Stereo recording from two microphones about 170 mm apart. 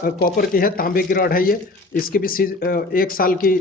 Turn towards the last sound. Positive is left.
turn(degrees=55)  # may be behind; listen again after turning